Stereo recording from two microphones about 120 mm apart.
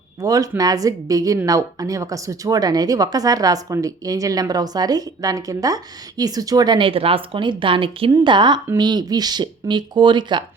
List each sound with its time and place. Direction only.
0.2 s speech: 30° right (ahead or behind)